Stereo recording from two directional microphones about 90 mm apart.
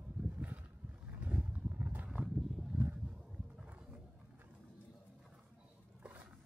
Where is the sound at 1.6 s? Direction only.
20° right (ahead or behind).